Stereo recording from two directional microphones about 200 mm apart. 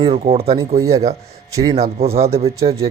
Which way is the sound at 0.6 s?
15° right (ahead or behind).